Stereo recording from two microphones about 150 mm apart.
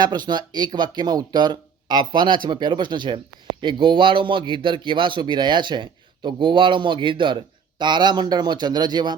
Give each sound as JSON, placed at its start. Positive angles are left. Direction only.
{"t": 0.0, "sound": "a man's voice", "side_deg": -30}